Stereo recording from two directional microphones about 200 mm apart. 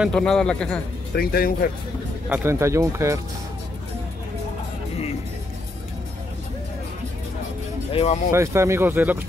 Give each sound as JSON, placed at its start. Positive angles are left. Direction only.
{"t": 0.0, "sound": "speech", "side_deg": 5}
{"t": 1.1, "sound": "speech", "side_deg": 50}
{"t": 2.2, "sound": "speech", "side_deg": -10}
{"t": 7.9, "sound": "speech", "side_deg": 30}
{"t": 8.3, "sound": "speech", "side_deg": -15}